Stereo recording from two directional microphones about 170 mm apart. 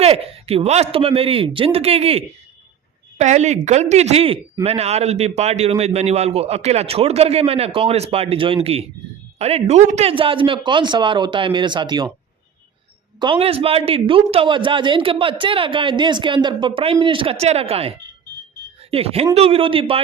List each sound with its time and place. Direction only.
0.0 s a man's voice: 35° right (ahead or behind)
13.1 s a man's voice: 30° right (ahead or behind)